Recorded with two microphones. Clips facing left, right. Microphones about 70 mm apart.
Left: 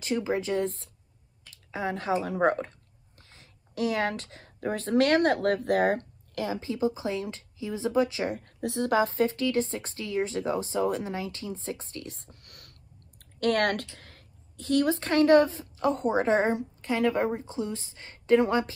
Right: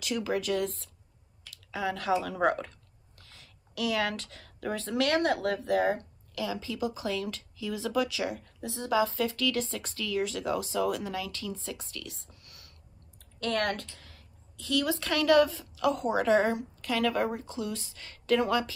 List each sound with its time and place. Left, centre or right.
0.0 s speech: left